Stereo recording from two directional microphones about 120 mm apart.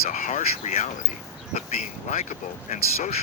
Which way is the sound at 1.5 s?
65° left (ahead or behind).